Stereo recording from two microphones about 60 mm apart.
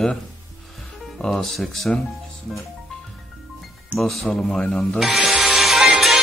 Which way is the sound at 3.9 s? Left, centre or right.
Centre.